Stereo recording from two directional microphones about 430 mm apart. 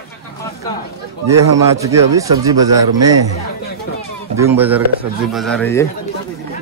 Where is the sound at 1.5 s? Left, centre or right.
Centre.